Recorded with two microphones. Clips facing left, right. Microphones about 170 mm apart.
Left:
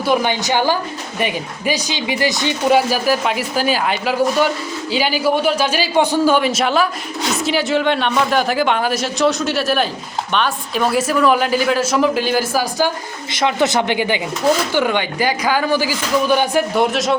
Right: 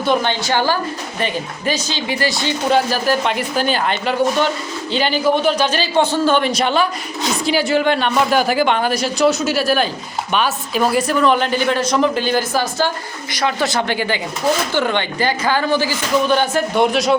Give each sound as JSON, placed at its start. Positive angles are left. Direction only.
{"t": 0.0, "sound": "a woman's voice", "side_deg": 10}
{"t": 13.3, "sound": "speech", "side_deg": 20}